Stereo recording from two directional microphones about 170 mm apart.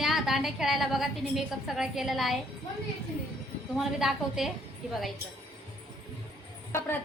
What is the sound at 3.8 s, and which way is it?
A woman's voice, centre (ahead or behind).